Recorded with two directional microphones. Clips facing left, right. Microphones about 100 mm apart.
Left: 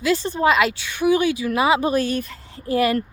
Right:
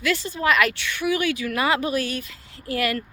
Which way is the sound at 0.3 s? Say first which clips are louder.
Left 2 dB; 25° left (ahead or behind).